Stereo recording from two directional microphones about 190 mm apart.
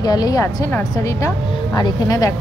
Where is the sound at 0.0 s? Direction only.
20° left (ahead or behind).